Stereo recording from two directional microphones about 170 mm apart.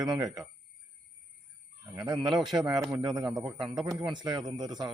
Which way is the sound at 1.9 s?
25° right (ahead or behind).